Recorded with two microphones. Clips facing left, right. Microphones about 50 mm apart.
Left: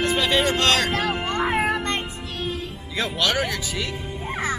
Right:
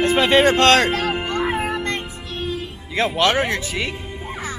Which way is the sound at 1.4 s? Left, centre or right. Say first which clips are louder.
Left 3 dB; centre.